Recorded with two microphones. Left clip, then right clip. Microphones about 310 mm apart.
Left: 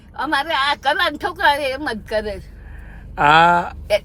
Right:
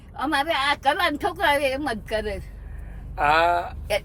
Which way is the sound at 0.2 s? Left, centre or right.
Centre.